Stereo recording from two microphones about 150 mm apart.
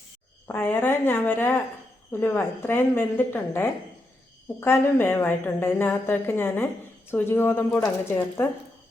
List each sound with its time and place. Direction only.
0.4 s a woman's voice: 15° left (ahead or behind)